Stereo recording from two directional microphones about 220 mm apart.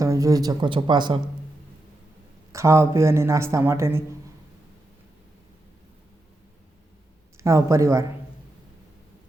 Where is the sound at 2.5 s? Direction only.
15° right (ahead or behind).